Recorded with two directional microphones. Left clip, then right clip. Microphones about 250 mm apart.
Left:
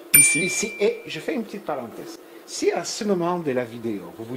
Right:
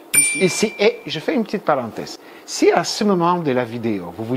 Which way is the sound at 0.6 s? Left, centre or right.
Right.